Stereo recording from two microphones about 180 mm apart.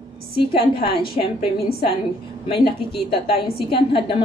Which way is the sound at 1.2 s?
40° left (ahead or behind).